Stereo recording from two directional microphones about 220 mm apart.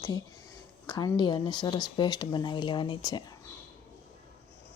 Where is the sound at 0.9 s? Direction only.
20° left (ahead or behind).